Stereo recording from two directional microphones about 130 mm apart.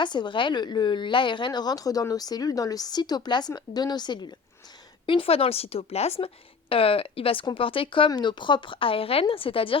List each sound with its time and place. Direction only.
0.0 s a woman's voice: 35° left (ahead or behind)